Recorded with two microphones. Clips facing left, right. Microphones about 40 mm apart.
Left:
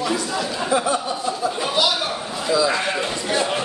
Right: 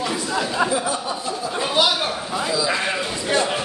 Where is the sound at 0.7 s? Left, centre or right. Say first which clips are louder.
Left 3 dB; left.